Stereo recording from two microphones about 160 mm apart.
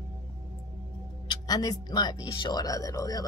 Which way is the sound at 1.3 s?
25° left (ahead or behind).